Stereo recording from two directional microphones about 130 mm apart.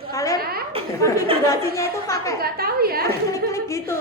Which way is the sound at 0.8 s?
45° right (ahead or behind).